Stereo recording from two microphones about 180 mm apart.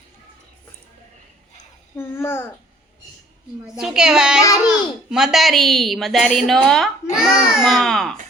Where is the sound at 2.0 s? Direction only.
15° left (ahead or behind).